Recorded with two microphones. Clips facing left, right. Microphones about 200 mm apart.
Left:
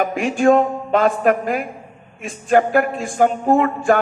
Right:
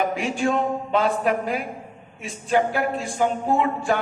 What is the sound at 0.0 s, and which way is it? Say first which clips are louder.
Speech: left 6 dB; 55° left (ahead or behind).